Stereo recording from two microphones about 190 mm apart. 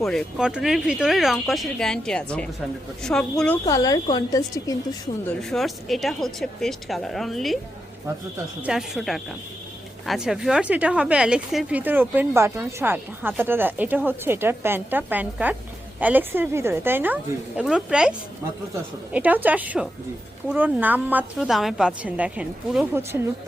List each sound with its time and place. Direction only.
0.0 s a woman's voice: centre (ahead or behind)
3.7 s a woman's voice: 20° left (ahead or behind)
5.4 s a woman's voice: centre (ahead or behind)
8.6 s a woman's voice: centre (ahead or behind)
19.1 s a woman's voice: 10° right (ahead or behind)